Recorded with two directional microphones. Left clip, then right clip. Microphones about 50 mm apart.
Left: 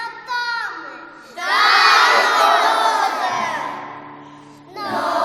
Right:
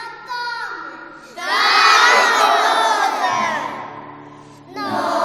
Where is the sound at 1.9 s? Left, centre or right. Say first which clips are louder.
Right 1 dB; right.